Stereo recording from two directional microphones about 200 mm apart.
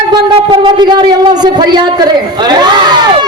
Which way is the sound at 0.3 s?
25° right (ahead or behind).